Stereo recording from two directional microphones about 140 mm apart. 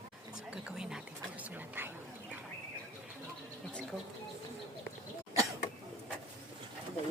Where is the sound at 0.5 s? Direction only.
5° right (ahead or behind).